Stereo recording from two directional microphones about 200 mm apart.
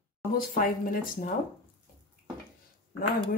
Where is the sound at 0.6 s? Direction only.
45° left (ahead or behind).